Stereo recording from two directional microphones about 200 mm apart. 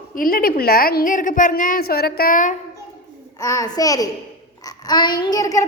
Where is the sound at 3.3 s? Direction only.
15° left (ahead or behind).